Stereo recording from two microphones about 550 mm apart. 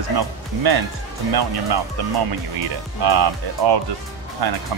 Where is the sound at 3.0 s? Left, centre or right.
Right.